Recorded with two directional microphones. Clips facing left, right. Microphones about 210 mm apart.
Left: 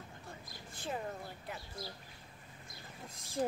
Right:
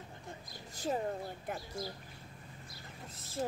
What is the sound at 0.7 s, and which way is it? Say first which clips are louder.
Speech: right 6 dB; 40° right (ahead or behind).